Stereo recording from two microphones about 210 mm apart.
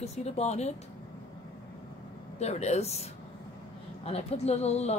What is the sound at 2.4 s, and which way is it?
Speech, 30° left (ahead or behind).